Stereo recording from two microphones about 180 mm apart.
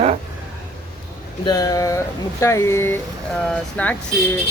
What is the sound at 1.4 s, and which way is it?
Speech, 20° left (ahead or behind).